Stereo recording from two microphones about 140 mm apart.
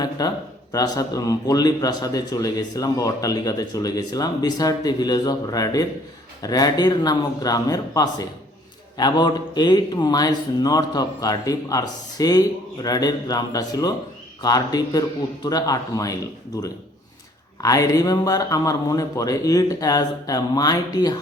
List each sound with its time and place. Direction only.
0.2 s speech: 25° left (ahead or behind)
17.6 s speech: 25° left (ahead or behind)